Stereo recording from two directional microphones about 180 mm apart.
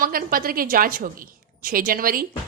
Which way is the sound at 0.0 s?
50° right (ahead or behind).